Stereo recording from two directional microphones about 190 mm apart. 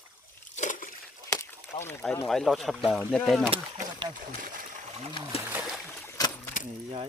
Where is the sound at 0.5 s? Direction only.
40° left (ahead or behind).